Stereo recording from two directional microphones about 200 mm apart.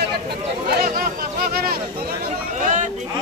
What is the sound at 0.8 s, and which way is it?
Speech, 50° right (ahead or behind).